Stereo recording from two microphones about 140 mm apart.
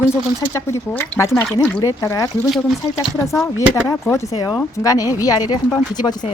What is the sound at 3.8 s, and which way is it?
A woman's voice, 20° left (ahead or behind).